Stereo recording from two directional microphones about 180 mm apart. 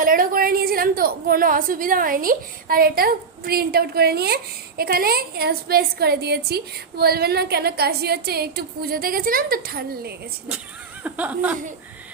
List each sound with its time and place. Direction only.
0.0 s a woman's voice: 50° right (ahead or behind)
11.0 s speech: 10° right (ahead or behind)